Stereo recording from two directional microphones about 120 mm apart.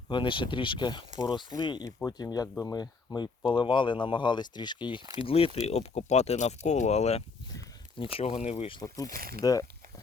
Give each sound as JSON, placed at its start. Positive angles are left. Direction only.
{"t": 0.1, "sound": "speech", "side_deg": 45}
{"t": 5.2, "sound": "speech", "side_deg": 50}
{"t": 5.6, "sound": "speech", "side_deg": 65}
{"t": 7.9, "sound": "speech", "side_deg": 50}
{"t": 8.8, "sound": "speech", "side_deg": 30}